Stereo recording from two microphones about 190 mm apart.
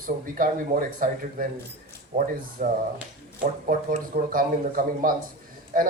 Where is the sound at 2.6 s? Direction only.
45° right (ahead or behind).